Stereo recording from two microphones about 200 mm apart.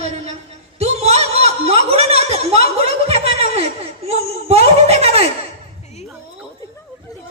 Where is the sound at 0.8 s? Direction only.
35° right (ahead or behind).